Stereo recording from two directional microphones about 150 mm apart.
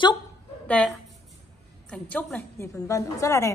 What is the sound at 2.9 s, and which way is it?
Speech, 20° left (ahead or behind).